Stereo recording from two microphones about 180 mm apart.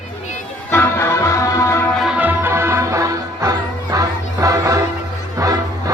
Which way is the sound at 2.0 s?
5° right (ahead or behind).